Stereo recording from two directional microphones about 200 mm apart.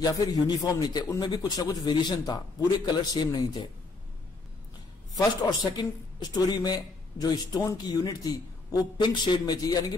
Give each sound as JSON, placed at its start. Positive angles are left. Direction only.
{"t": 0.0, "sound": "a man's voice", "side_deg": 20}
{"t": 5.2, "sound": "a man's voice", "side_deg": 20}